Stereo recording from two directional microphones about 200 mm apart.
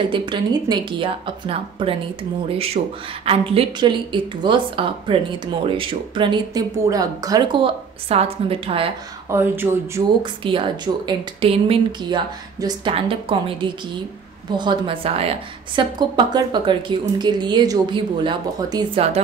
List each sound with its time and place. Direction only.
0.1 s speech: 25° right (ahead or behind)
9.3 s speech: 10° right (ahead or behind)
10.2 s speech: 25° right (ahead or behind)